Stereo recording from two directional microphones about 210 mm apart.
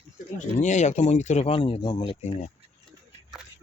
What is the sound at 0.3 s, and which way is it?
Speech, 35° left (ahead or behind).